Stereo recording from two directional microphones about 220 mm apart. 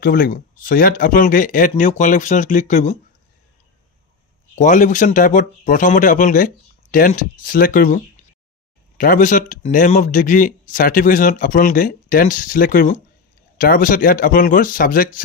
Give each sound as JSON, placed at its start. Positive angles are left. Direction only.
{"t": 0.0, "sound": "speech", "side_deg": 40}
{"t": 4.6, "sound": "speech", "side_deg": 35}